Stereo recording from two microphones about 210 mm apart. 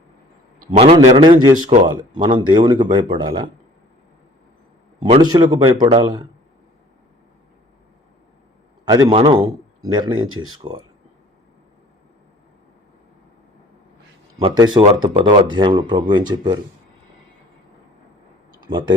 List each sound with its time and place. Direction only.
0.7 s speech: 30° right (ahead or behind)
5.2 s speech: 20° right (ahead or behind)
8.8 s a sound: 20° right (ahead or behind)
9.2 s a man's voice: 15° right (ahead or behind)
10.1 s speech: 75° right (ahead or behind)
14.3 s speech: 25° right (ahead or behind)
18.6 s speech: 20° right (ahead or behind)